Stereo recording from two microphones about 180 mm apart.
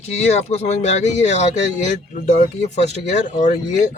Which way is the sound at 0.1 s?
35° left (ahead or behind).